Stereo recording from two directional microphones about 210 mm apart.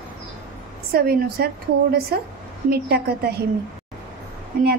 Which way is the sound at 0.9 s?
45° right (ahead or behind).